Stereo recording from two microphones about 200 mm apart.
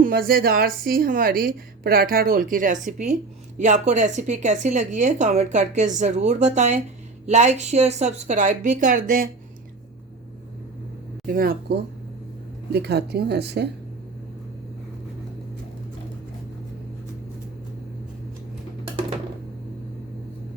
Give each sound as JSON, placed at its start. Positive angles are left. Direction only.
{"t": 0.0, "sound": "a woman's voice", "side_deg": -50}
{"t": 11.3, "sound": "a woman's voice", "side_deg": -45}